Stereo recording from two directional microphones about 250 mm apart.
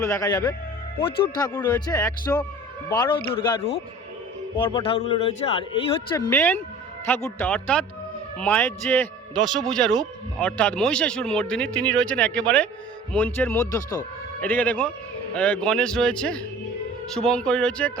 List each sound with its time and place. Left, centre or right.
0.0 s speech: centre